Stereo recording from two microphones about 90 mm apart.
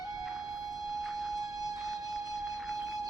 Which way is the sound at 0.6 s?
40° right (ahead or behind).